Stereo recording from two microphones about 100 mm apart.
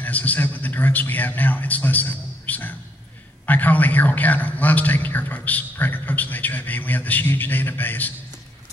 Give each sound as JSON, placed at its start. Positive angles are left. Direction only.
{"t": 0.0, "sound": "a man's voice", "side_deg": 15}